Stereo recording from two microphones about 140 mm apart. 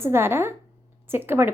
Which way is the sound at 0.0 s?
15° right (ahead or behind).